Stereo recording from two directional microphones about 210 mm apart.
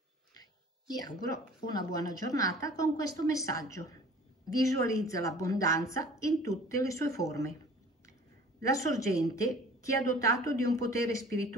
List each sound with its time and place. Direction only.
1.7 s a woman's voice: 15° left (ahead or behind)
8.7 s a woman's voice: 15° left (ahead or behind)